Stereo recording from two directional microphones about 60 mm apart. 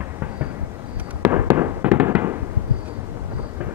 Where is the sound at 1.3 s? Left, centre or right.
Right.